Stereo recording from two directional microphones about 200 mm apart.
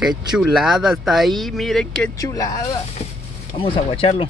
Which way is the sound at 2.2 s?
15° left (ahead or behind).